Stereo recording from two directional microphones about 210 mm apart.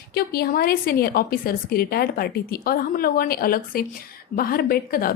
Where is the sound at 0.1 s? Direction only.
45° left (ahead or behind).